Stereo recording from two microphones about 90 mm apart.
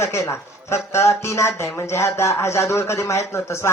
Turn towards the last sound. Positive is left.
turn(degrees=30)  # may be behind; listen again after turning